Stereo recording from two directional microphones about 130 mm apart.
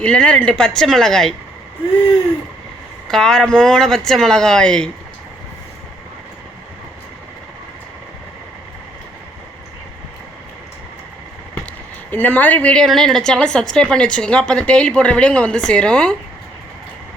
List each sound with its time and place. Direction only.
0.0 s speech: 10° left (ahead or behind)
3.1 s speech: 5° left (ahead or behind)
12.1 s a woman's voice: 15° left (ahead or behind)